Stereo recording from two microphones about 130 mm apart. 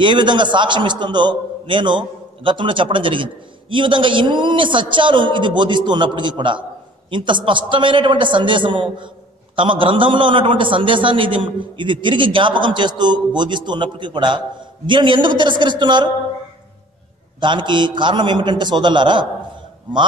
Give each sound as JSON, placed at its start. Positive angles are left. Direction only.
{"t": 0.0, "sound": "a man's voice", "side_deg": -35}
{"t": 17.4, "sound": "a man's voice", "side_deg": -35}